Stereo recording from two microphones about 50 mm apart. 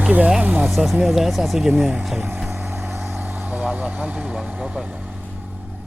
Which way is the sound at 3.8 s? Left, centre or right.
Right.